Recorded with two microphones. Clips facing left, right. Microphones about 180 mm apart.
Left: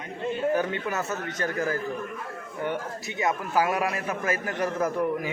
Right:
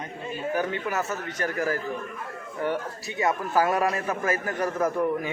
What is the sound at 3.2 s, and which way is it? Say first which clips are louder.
A man's voice: right 1 dB; 15° left (ahead or behind).